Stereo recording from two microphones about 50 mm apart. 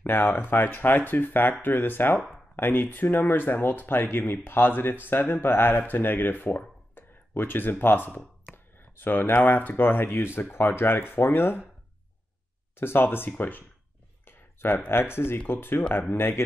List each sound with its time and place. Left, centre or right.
0.0 s speech: left
7.0 s a sound: left
7.8 s speech: left
12.7 s speech: left
13.4 s speech: left
14.2 s a sound: left
14.9 s speech: left